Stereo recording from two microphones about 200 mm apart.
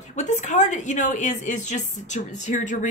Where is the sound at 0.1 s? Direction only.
35° left (ahead or behind).